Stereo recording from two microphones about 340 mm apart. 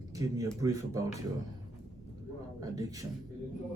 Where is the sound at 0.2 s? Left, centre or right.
Centre.